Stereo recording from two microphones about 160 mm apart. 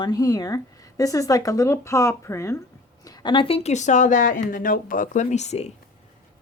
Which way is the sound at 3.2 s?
30° left (ahead or behind).